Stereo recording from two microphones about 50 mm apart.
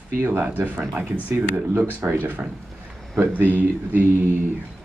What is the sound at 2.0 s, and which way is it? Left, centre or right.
Speech, right.